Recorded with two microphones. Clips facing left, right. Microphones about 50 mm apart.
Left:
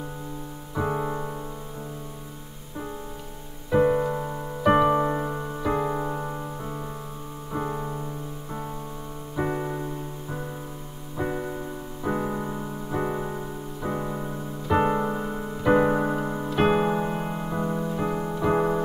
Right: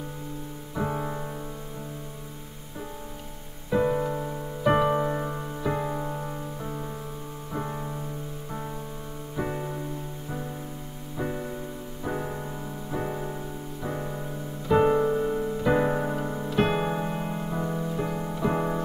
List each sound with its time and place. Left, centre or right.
0.7 s music: centre
3.7 s music: centre
6.6 s music: centre
7.5 s piano: centre
9.4 s music: centre
11.1 s music: centre